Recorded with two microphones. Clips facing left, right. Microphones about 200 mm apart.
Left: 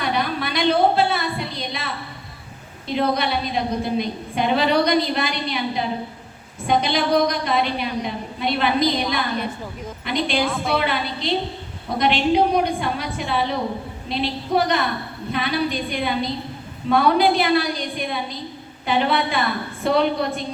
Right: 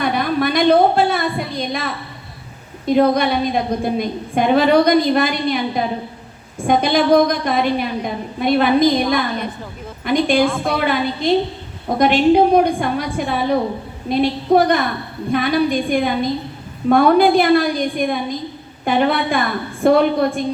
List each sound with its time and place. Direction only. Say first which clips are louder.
0.0 s a woman's voice: right 6 dB; 50° right (ahead or behind)
10.4 s a woman's voice: right 6 dB; 5° left (ahead or behind)
10.7 s a woman's voice: right 4 dB; 50° right (ahead or behind)